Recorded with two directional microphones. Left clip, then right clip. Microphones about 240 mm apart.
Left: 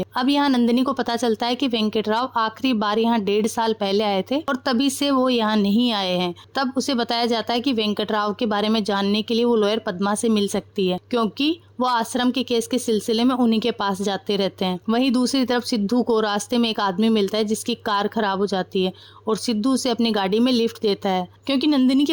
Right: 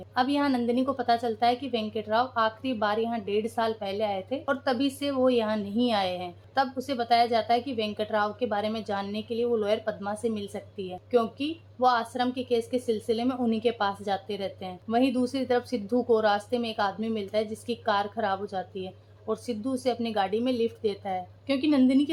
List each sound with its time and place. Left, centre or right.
0.2 s a woman's voice: left